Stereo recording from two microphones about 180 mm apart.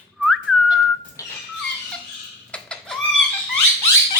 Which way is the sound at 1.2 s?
20° left (ahead or behind).